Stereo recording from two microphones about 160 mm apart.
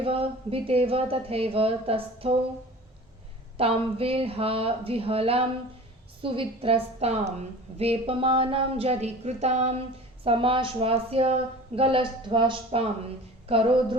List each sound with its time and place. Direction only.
0.0 s a woman's voice: 35° right (ahead or behind)
3.6 s a woman's voice: 35° right (ahead or behind)